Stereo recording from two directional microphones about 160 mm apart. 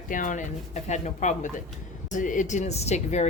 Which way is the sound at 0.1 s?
55° left (ahead or behind).